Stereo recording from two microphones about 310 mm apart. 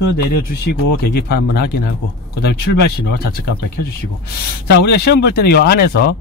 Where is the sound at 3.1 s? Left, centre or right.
Left.